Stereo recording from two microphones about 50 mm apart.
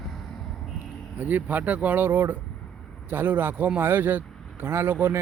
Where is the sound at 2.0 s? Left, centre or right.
Right.